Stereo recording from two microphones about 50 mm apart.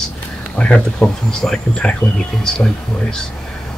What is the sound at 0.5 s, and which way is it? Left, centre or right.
Speech, left.